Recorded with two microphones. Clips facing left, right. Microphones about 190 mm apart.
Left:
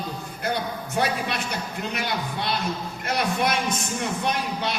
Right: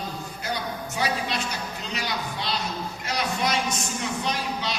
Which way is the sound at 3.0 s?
55° left (ahead or behind).